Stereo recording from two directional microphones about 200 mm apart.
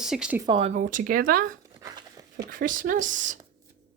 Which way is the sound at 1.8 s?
20° right (ahead or behind).